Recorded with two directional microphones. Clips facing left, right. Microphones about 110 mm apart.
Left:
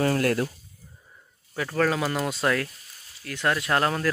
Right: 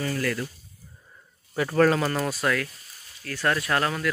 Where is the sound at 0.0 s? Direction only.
55° left (ahead or behind).